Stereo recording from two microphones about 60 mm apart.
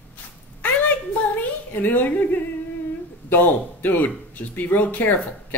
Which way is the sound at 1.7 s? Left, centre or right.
Left.